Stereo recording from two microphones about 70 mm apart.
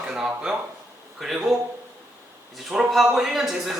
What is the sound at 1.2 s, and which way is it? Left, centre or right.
Speech, centre.